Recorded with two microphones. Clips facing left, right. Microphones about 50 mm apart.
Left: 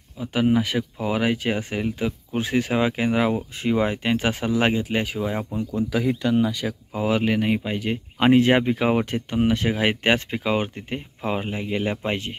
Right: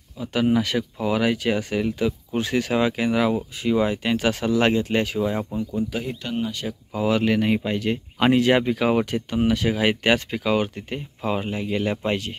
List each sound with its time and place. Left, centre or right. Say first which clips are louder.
0.2 s speech: even; left
4.3 s speech: right 3 dB; centre
6.9 s speech: right 2 dB; centre